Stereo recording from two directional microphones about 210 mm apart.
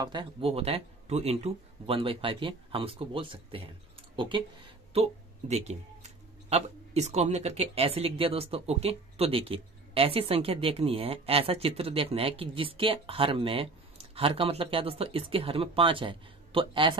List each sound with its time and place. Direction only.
0.0 s speech: 20° right (ahead or behind)
4.9 s speech: 30° right (ahead or behind)